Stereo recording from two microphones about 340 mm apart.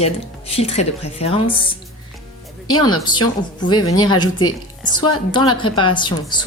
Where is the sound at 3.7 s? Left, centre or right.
Left.